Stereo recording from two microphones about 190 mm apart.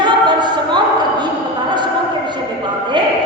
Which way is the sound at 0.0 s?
25° right (ahead or behind).